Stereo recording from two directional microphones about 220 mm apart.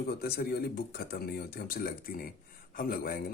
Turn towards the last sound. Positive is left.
turn(degrees=40)  # may be behind; listen again after turning